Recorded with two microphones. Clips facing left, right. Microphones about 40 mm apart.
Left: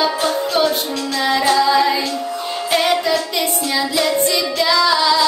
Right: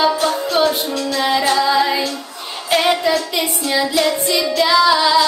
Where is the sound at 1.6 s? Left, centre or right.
Centre.